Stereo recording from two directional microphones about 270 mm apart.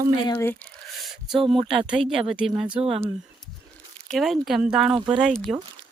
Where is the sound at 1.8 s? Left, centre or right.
Centre.